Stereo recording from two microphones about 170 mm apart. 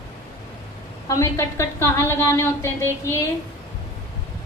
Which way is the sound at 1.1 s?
15° left (ahead or behind).